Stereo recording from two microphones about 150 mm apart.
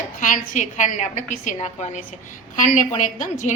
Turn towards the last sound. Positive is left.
turn(degrees=55)  # may be behind; listen again after turning